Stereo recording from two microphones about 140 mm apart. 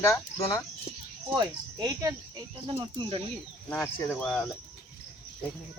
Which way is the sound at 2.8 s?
35° right (ahead or behind).